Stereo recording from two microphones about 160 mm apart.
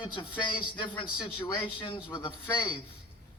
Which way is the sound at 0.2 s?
30° left (ahead or behind).